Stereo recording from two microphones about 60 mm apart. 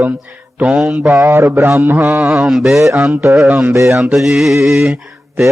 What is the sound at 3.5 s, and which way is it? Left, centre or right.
Mantra, right.